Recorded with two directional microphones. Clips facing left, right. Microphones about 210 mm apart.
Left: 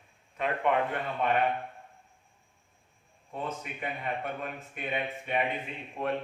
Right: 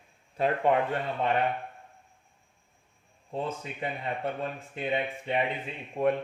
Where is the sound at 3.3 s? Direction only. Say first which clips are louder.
Right 3 dB; 30° right (ahead or behind).